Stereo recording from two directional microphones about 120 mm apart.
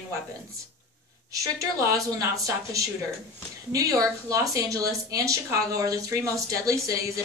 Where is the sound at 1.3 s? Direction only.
30° right (ahead or behind).